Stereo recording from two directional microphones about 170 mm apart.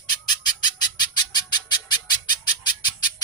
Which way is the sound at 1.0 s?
25° left (ahead or behind).